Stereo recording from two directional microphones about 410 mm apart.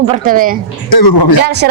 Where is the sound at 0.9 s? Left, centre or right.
Left.